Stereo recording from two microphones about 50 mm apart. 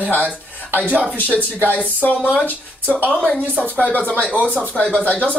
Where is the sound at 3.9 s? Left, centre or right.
Left.